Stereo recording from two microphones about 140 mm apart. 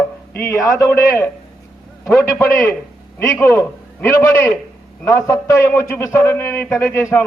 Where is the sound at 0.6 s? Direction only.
25° left (ahead or behind).